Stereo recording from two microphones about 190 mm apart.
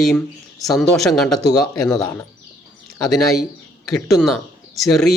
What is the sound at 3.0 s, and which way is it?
Speech, centre (ahead or behind).